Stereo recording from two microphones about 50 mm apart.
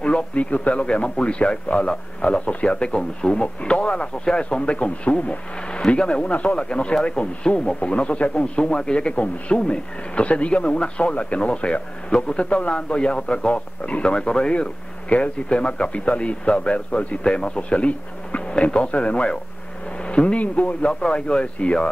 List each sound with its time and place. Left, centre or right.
0.0 s a man's voice: left